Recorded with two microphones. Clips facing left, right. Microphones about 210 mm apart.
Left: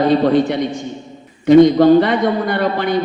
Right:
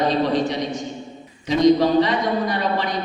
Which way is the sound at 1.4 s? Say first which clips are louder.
Left 8 dB; 55° left (ahead or behind).